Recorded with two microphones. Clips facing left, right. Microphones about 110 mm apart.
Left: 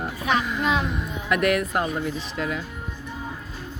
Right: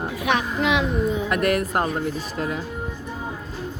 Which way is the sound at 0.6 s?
75° right (ahead or behind).